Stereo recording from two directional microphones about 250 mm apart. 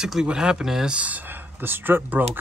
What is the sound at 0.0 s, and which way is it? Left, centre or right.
Speech, centre.